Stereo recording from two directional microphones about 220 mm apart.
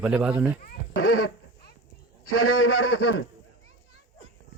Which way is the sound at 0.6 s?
40° left (ahead or behind).